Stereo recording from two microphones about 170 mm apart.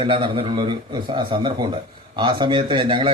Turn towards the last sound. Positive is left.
turn(degrees=-30)  # may be behind; listen again after turning